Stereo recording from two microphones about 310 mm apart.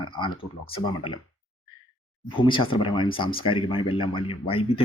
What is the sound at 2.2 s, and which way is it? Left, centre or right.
Speech, centre.